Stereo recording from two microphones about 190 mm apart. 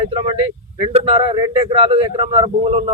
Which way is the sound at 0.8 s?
30° right (ahead or behind).